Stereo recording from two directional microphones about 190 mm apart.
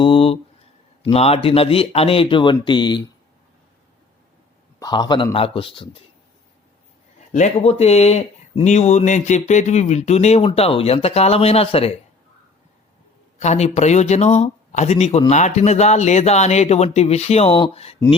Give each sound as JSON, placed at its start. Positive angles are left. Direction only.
{"t": 0.0, "sound": "a sound", "side_deg": 30}
{"t": 1.1, "sound": "speech", "side_deg": 30}
{"t": 4.8, "sound": "speech", "side_deg": 25}
{"t": 7.3, "sound": "speech", "side_deg": 35}
{"t": 13.4, "sound": "speech", "side_deg": 35}